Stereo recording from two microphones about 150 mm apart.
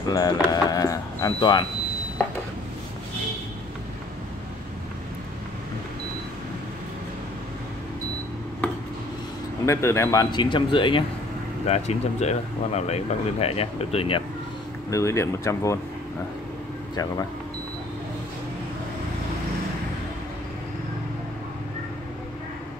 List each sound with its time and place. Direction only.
0.0 s speech: 25° left (ahead or behind)
9.7 s speech: 20° left (ahead or behind)
10.3 s speech: 30° left (ahead or behind)
11.6 s speech: 45° left (ahead or behind)
14.9 s speech: 20° left (ahead or behind)
16.9 s speech: 25° left (ahead or behind)